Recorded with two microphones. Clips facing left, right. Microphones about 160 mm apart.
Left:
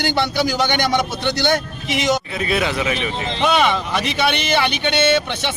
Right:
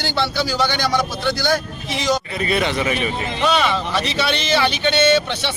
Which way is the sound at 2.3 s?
Centre (ahead or behind).